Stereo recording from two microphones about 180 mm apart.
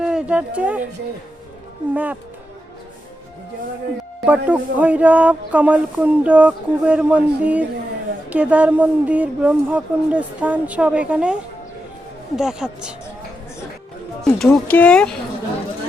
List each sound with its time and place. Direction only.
0.0 s speech: 5° right (ahead or behind)
1.9 s speech: 10° right (ahead or behind)
4.3 s speech: 10° right (ahead or behind)
12.4 s speech: 5° right (ahead or behind)
14.2 s speech: centre (ahead or behind)